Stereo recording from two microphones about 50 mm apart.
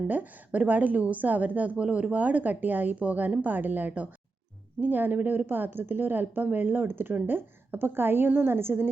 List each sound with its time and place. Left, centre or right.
0.1 s speech: right